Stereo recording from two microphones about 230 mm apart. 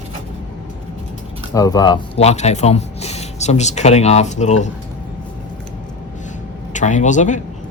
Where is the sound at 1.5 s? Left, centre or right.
Centre.